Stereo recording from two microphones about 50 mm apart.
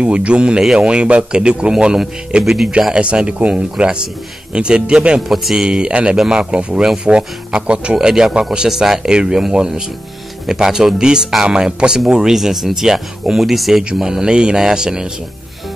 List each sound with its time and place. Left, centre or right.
0.0 s speech: right
2.4 s speech: centre
2.9 s speech: centre
5.3 s speech: centre
5.7 s speech: centre